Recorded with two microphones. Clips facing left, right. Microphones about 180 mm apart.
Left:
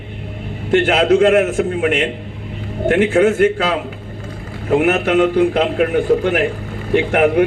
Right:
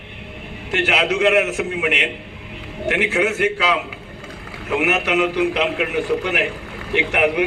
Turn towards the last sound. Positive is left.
turn(degrees=45)  # may be behind; listen again after turning